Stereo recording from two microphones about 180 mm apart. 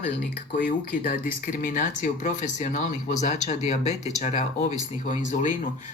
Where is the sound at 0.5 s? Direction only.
45° left (ahead or behind).